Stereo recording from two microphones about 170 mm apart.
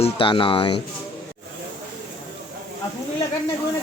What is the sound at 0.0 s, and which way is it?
Speech, 30° left (ahead or behind).